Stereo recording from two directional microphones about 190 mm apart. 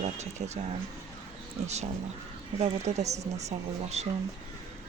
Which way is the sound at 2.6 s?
35° right (ahead or behind).